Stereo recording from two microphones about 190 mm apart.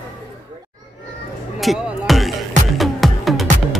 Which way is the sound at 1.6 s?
Centre (ahead or behind).